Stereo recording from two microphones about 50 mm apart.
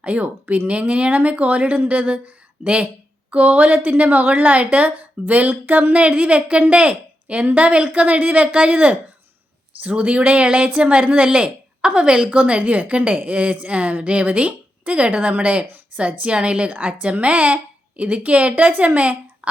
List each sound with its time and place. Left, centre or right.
0.0 s a woman's voice: right